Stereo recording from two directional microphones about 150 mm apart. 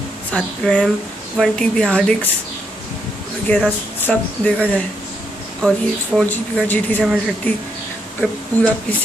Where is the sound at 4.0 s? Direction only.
10° left (ahead or behind).